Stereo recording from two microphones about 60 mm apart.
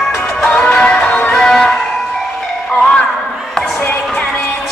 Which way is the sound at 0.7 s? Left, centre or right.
Centre.